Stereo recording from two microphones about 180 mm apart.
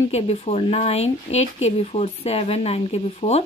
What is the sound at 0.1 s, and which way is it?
Speech, 35° left (ahead or behind).